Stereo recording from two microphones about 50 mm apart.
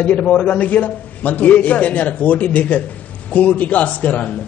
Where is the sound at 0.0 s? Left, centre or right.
Left.